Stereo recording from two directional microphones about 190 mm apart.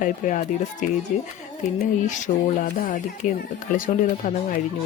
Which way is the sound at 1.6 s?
40° left (ahead or behind).